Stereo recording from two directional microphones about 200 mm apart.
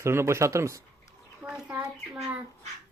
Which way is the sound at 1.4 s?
5° right (ahead or behind).